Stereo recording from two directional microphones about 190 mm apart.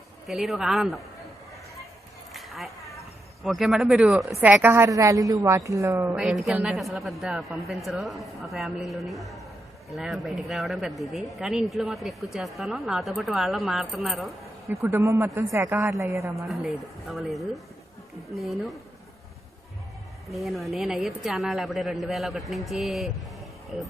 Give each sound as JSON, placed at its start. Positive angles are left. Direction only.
{"t": 0.3, "sound": "speech", "side_deg": 0}
{"t": 2.3, "sound": "a sound", "side_deg": 0}
{"t": 3.4, "sound": "a woman's voice", "side_deg": 0}
{"t": 6.2, "sound": "speech", "side_deg": 0}
{"t": 14.7, "sound": "a woman's voice", "side_deg": -15}
{"t": 16.5, "sound": "speech", "side_deg": 0}
{"t": 20.2, "sound": "speech", "side_deg": 0}